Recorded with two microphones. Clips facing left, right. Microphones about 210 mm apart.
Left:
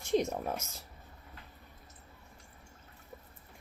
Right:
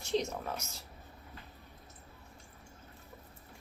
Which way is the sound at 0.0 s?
55° left (ahead or behind).